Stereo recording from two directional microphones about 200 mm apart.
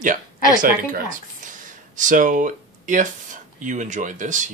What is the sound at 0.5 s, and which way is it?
Speech, 40° right (ahead or behind).